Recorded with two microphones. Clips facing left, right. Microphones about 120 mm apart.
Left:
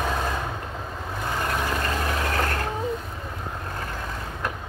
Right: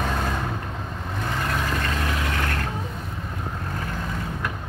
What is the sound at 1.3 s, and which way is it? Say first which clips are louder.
Vehicle: left 1 dB; 15° left (ahead or behind).